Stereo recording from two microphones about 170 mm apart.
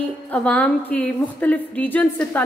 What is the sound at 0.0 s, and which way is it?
A woman's voice, 10° left (ahead or behind).